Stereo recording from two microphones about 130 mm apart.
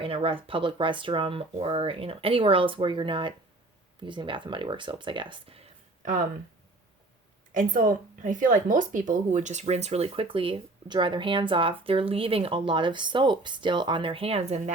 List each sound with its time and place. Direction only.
0.0 s speech: 45° right (ahead or behind)
7.5 s speech: 90° right; by 14.6 s 55° right (ahead or behind)